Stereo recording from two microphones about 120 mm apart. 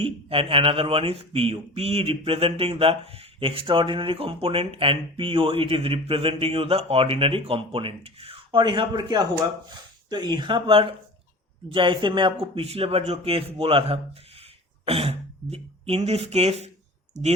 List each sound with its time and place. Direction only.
0.0 s speech: 50° right (ahead or behind)